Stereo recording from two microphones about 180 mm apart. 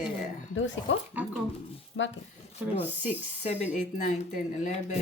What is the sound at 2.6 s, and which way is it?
Speech, 10° right (ahead or behind).